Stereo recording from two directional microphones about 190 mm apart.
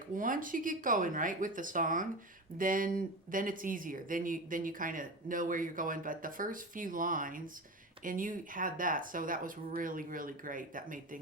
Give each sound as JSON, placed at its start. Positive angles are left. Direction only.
{"t": 0.2, "sound": "speech", "side_deg": -45}